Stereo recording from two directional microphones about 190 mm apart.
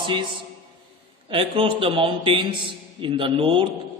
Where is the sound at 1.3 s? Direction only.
30° right (ahead or behind).